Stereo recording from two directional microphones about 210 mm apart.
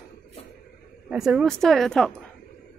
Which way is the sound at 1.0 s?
5° right (ahead or behind).